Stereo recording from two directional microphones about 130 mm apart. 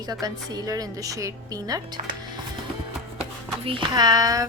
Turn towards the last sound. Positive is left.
turn(degrees=-30)  # may be behind; listen again after turning